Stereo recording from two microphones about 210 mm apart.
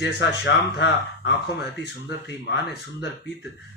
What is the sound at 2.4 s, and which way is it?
Speech, 55° left (ahead or behind).